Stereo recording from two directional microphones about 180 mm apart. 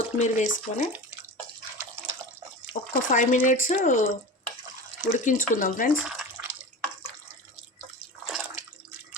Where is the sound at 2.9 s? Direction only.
45° left (ahead or behind).